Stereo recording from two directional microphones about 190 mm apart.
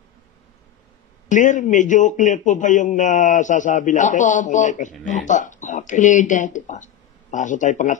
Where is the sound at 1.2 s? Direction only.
40° left (ahead or behind).